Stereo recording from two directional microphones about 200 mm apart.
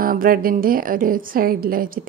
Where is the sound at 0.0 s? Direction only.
45° right (ahead or behind).